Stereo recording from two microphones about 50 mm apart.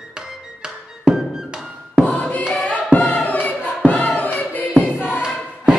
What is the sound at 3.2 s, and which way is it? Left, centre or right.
Choir, left.